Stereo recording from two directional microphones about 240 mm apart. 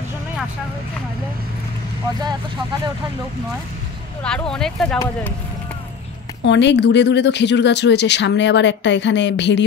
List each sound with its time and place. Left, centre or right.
4.2 s speech: centre
4.9 s speech: centre
6.4 s speech: left